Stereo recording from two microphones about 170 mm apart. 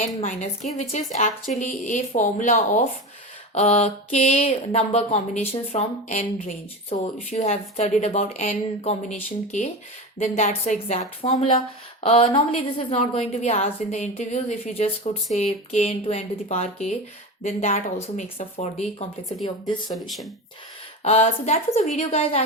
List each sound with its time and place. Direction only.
0.0 s a woman's voice: 45° left (ahead or behind)
21.0 s a woman's voice: 40° left (ahead or behind)